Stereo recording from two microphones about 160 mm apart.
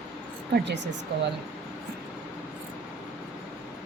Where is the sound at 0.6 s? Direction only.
90° right.